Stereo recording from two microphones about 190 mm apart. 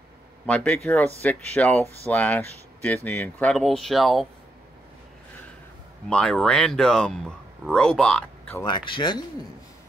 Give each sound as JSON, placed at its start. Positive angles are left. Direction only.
{"t": 0.5, "sound": "speech", "side_deg": 5}
{"t": 6.0, "sound": "speech", "side_deg": 5}
{"t": 8.6, "sound": "speech", "side_deg": 25}